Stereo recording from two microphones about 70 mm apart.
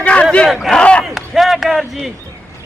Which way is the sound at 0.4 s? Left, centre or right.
Centre.